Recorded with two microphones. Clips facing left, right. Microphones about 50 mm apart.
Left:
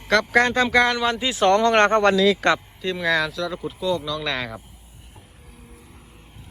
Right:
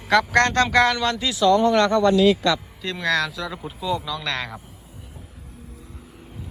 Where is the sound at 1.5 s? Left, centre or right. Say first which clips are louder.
Right 1 dB; left.